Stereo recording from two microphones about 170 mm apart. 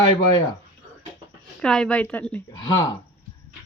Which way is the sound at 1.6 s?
5° left (ahead or behind).